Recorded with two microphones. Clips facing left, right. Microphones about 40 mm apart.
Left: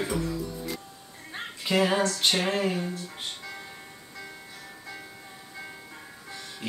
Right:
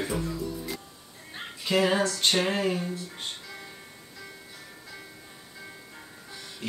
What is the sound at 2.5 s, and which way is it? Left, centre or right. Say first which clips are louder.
Speech: even; centre.